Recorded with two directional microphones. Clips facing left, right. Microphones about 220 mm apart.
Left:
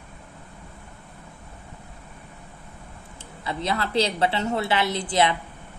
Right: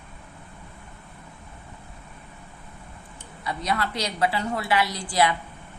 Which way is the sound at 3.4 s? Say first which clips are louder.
Left 1 dB; 25° left (ahead or behind).